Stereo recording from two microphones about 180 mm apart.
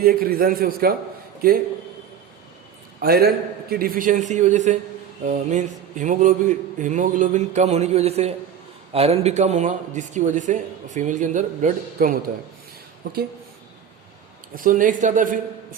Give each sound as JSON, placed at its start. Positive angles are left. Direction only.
{"t": 0.0, "sound": "a man's voice", "side_deg": -55}
{"t": 3.0, "sound": "a man's voice", "side_deg": -60}
{"t": 14.5, "sound": "speech", "side_deg": -50}